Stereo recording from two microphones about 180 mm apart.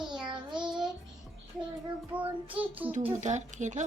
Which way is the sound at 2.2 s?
10° right (ahead or behind).